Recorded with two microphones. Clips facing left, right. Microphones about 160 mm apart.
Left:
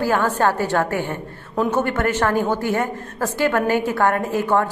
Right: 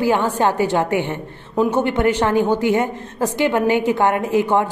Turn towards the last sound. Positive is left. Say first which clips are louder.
# right 2 dB
turn(degrees=-15)  # may be behind; listen again after turning